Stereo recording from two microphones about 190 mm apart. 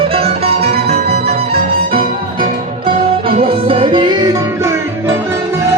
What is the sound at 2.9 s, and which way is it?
Music, 30° right (ahead or behind).